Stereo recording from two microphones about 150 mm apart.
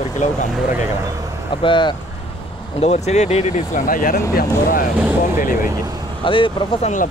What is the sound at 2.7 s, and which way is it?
Speech, 45° left (ahead or behind).